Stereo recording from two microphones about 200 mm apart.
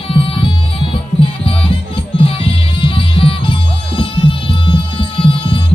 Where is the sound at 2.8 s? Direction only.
25° left (ahead or behind).